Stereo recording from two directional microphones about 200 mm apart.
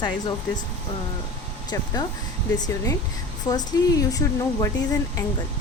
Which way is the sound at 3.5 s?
20° left (ahead or behind).